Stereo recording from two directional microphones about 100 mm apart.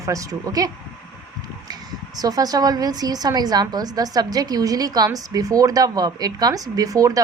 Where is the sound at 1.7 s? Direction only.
40° right (ahead or behind).